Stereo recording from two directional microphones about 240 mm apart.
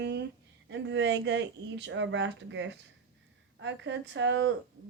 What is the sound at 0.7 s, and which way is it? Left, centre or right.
Speech, right.